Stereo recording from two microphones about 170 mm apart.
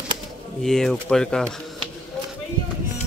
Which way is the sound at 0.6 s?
5° left (ahead or behind).